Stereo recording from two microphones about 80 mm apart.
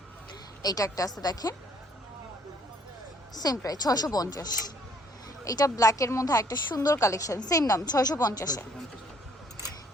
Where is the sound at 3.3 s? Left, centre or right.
Left.